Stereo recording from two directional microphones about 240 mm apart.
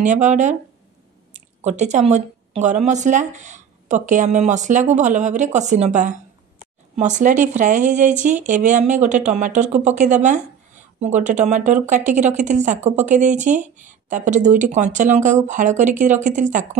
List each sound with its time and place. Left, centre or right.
0.0 s speech: right